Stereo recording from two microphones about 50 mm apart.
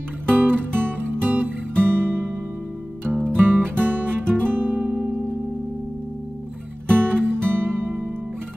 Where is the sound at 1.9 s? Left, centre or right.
Right.